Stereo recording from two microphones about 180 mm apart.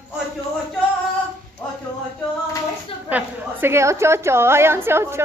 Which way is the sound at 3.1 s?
15° right (ahead or behind).